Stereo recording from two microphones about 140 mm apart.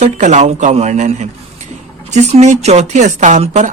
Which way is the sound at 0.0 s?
55° right (ahead or behind).